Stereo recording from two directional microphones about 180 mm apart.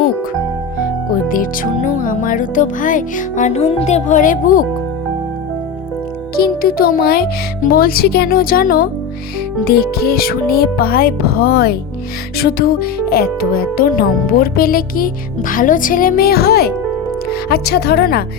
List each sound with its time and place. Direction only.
1.1 s speech: 50° left (ahead or behind)
6.3 s speech: 55° left (ahead or behind)